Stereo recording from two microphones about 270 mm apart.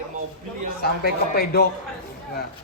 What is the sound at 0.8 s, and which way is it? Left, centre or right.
Speech, left.